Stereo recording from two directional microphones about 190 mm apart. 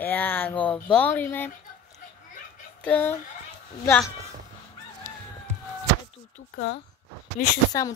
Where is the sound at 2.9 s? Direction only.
10° left (ahead or behind).